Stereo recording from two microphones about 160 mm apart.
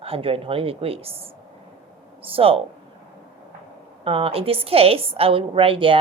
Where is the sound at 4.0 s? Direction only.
35° right (ahead or behind).